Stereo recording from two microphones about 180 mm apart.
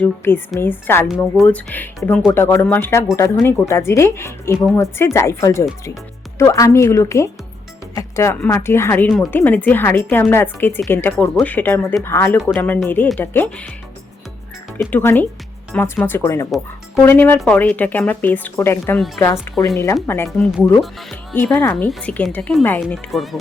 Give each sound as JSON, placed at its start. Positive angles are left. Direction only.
{"t": 0.0, "sound": "a woman's voice", "side_deg": 10}
{"t": 14.8, "sound": "a woman's voice", "side_deg": 10}
{"t": 18.9, "sound": "speech", "side_deg": 0}
{"t": 19.6, "sound": "a woman's voice", "side_deg": 15}
{"t": 20.2, "sound": "speech", "side_deg": 0}
{"t": 21.3, "sound": "a woman's voice", "side_deg": 10}